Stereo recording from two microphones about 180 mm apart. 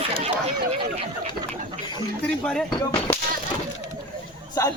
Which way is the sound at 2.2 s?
5° left (ahead or behind).